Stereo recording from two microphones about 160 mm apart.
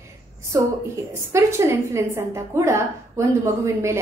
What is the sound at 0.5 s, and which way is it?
A woman's voice, 20° right (ahead or behind).